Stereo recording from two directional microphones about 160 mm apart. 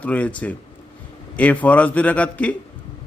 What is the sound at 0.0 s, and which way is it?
A man's voice, 10° left (ahead or behind).